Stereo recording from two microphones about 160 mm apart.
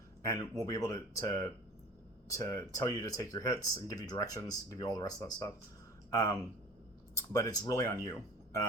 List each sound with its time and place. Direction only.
0.2 s speech: 20° left (ahead or behind)